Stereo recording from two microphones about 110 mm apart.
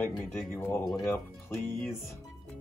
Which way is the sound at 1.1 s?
25° left (ahead or behind).